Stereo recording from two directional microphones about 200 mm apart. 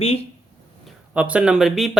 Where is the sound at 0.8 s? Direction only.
5° right (ahead or behind).